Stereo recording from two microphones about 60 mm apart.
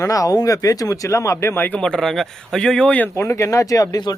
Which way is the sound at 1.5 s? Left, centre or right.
Left.